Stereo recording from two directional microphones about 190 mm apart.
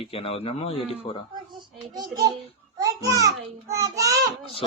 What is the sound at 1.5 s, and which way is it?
A child's voice, 25° right (ahead or behind).